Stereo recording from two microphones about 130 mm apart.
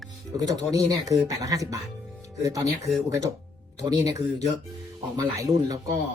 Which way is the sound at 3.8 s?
25° right (ahead or behind).